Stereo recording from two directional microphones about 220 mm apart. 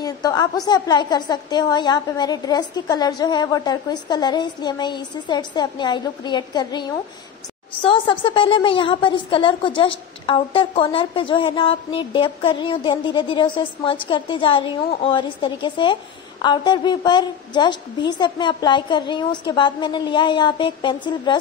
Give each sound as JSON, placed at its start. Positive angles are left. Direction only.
{"t": 0.0, "sound": "a woman's voice", "side_deg": 15}